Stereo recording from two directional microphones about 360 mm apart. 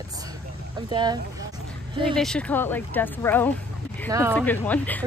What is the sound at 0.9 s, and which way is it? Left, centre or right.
Speech, centre.